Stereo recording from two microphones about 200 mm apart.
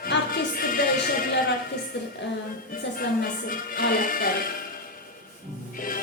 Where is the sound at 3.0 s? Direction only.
45° left (ahead or behind).